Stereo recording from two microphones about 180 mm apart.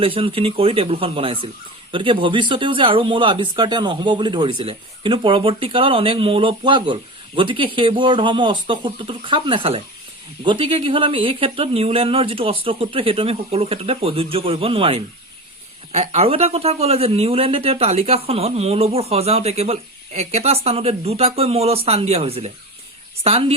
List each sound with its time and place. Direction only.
0.0 s speech: 30° right (ahead or behind)